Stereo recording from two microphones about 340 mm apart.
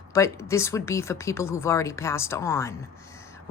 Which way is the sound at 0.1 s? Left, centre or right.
Centre.